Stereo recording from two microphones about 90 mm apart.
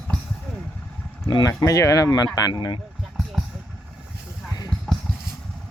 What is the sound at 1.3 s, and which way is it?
Speech, 55° left (ahead or behind).